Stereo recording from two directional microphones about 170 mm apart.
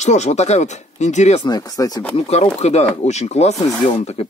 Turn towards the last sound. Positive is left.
turn(degrees=35)  # may be behind; listen again after turning